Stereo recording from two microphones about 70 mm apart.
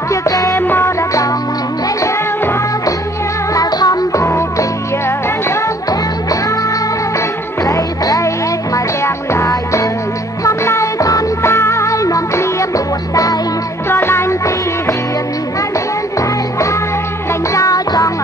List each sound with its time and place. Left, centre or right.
0.1 s music: left
0.6 s music: left
3.5 s music: left
7.6 s music: left
11.4 s music: left
13.8 s music: left
16.2 s music: left